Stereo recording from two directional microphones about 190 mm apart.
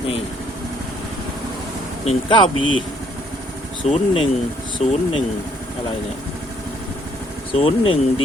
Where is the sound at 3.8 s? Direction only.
30° left (ahead or behind).